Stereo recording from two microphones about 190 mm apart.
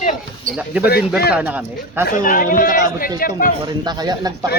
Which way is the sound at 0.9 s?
55° left (ahead or behind).